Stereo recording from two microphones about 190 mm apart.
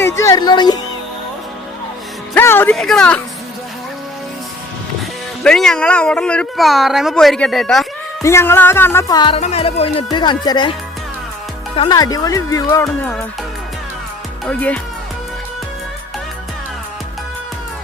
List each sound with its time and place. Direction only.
0.0 s music: 15° left (ahead or behind)
2.3 s speech: 10° left (ahead or behind)
5.4 s speech: 5° left (ahead or behind)
8.2 s speech: 15° left (ahead or behind)
9.4 s music: 35° left (ahead or behind)
11.8 s speech: 20° left (ahead or behind)
14.4 s speech: 5° left (ahead or behind)